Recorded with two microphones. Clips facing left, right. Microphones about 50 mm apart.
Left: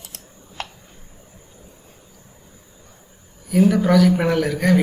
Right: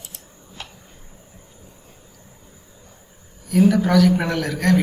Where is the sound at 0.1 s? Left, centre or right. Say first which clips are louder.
Left 1 dB; left.